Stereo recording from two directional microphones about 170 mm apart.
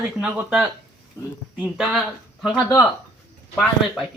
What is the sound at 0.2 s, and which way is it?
Speech, 5° right (ahead or behind).